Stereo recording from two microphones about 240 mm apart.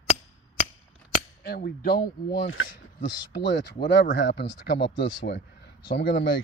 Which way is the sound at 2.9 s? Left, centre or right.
Left.